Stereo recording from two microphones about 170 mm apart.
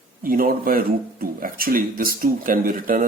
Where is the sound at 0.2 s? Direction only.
55° right (ahead or behind).